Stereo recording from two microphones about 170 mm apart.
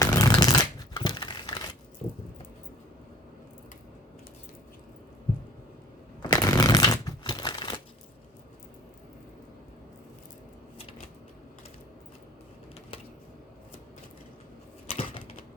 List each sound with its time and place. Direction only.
0.0 s a sound: 20° left (ahead or behind)
6.2 s shuffling cards: 20° left (ahead or behind)
14.8 s typewriter: 35° left (ahead or behind)